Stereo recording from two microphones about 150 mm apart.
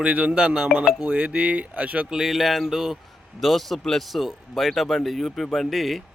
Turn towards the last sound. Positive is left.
turn(degrees=0)  # may be behind; listen again after turning